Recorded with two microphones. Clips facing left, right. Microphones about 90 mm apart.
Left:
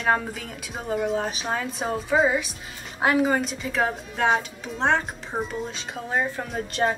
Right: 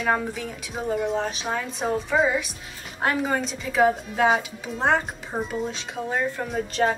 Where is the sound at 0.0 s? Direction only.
Centre (ahead or behind).